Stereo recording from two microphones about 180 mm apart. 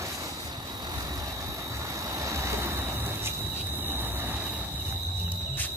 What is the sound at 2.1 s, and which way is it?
Vehicle, 15° right (ahead or behind).